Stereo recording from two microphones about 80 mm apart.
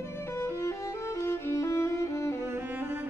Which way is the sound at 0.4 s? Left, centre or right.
Left.